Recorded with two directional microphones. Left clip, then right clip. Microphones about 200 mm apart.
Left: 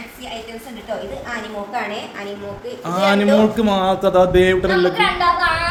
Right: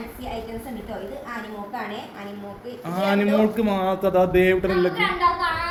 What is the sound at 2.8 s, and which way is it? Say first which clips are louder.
A man's voice: left 7 dB; 15° left (ahead or behind).